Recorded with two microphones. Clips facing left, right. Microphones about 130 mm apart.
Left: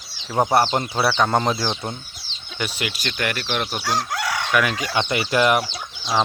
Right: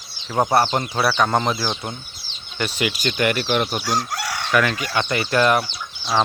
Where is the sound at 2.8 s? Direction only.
5° right (ahead or behind).